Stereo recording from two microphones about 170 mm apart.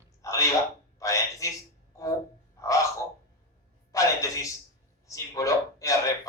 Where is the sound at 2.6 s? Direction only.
20° left (ahead or behind).